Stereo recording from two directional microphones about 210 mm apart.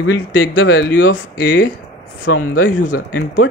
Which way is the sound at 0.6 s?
50° left (ahead or behind).